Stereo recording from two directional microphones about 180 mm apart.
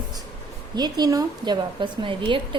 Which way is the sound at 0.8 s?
25° right (ahead or behind).